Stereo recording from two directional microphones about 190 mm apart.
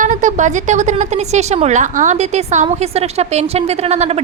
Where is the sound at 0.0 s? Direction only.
40° right (ahead or behind).